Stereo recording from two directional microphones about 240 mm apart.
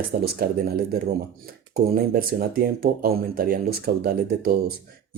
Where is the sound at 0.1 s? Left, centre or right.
Right.